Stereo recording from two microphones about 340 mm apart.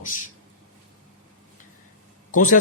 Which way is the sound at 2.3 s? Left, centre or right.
Left.